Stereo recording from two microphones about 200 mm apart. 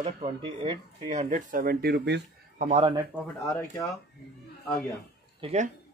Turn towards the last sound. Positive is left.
turn(degrees=-35)  # may be behind; listen again after turning